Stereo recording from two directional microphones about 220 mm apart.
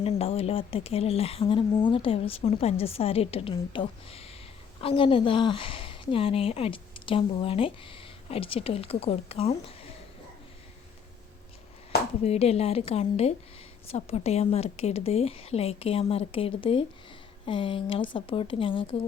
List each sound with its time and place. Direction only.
0.0 s speech: 25° left (ahead or behind)
12.2 s speech: 30° left (ahead or behind)